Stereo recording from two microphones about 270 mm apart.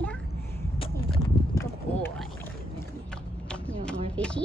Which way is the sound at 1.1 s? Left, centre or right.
Centre.